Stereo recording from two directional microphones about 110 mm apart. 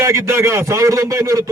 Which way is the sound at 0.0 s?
25° right (ahead or behind).